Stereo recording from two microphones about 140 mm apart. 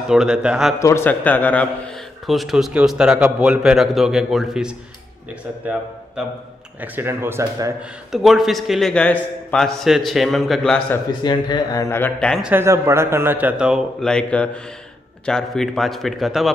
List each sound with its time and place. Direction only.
0.1 s a man's voice: 5° right (ahead or behind)
0.7 s a man's voice: 20° left (ahead or behind)
2.2 s a man's voice: centre (ahead or behind)
6.2 s a man's voice: 5° right (ahead or behind)
6.8 s a man's voice: 15° right (ahead or behind)
8.1 s a man's voice: centre (ahead or behind)
11.2 s speech: 30° left (ahead or behind)
12.4 s a man's voice: 10° right (ahead or behind)
14.0 s a man's voice: 5° left (ahead or behind)